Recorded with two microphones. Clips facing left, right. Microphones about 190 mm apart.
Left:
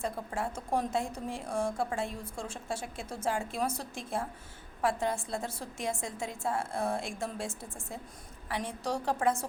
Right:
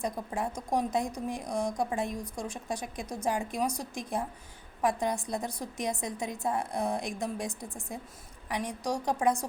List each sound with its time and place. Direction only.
0.0 s a woman's voice: 15° right (ahead or behind)